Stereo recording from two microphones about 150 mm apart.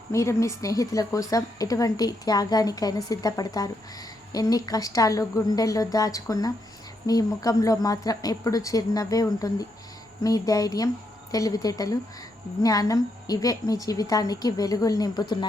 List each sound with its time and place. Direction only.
0.1 s a woman's voice: 20° left (ahead or behind)